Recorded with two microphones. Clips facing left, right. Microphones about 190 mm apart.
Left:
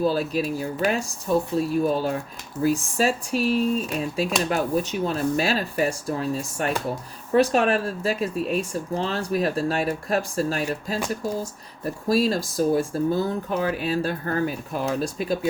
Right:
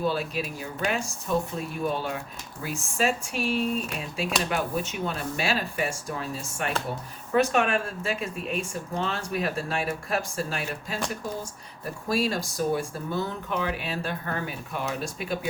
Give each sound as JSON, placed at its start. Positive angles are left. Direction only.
{"t": 0.0, "sound": "speech", "side_deg": 40}
{"t": 12.0, "sound": "speech", "side_deg": 40}